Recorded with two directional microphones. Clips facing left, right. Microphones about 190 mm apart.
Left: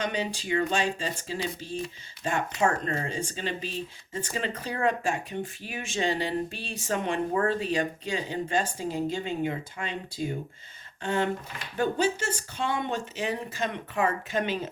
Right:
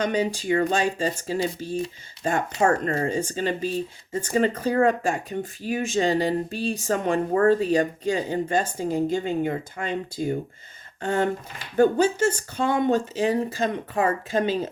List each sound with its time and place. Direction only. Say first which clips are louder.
0.0 s speech: right 6 dB; 40° right (ahead or behind)